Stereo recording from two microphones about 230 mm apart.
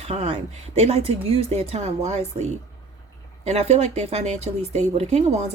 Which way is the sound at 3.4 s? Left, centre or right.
Right.